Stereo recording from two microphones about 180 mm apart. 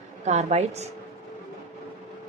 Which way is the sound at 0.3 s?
40° right (ahead or behind).